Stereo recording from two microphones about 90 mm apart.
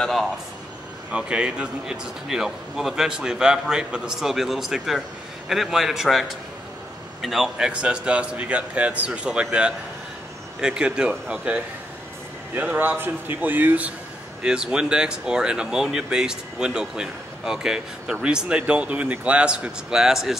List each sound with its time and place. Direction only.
0.0 s speech: centre (ahead or behind)
1.1 s a man's voice: 10° right (ahead or behind)